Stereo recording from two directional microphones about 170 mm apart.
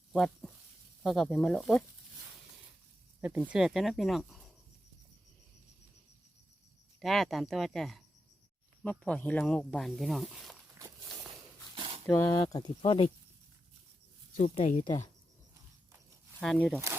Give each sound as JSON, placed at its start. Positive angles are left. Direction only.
{"t": 0.1, "sound": "a sound", "side_deg": 0}
{"t": 1.0, "sound": "speech", "side_deg": 0}
{"t": 3.2, "sound": "speech", "side_deg": -10}
{"t": 7.0, "sound": "speech", "side_deg": 0}
{"t": 12.0, "sound": "speech", "side_deg": 15}
{"t": 14.3, "sound": "speech", "side_deg": 35}
{"t": 16.4, "sound": "speech", "side_deg": 0}